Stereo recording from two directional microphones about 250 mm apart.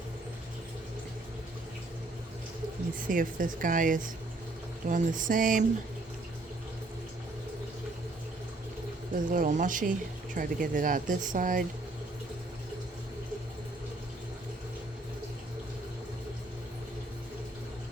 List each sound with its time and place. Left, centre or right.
3.1 s speech: right
9.3 s speech: right